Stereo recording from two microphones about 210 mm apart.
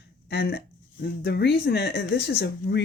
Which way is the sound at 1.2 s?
50° left (ahead or behind).